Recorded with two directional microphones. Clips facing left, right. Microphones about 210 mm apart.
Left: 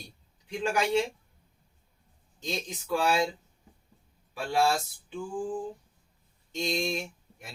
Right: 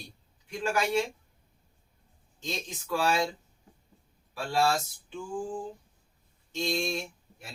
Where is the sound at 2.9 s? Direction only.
15° left (ahead or behind).